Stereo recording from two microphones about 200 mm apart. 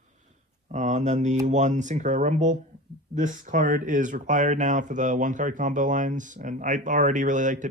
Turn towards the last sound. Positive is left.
turn(degrees=-40)  # may be behind; listen again after turning